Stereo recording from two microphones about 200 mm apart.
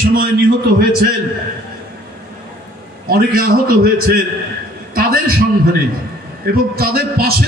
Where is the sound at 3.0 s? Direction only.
45° right (ahead or behind).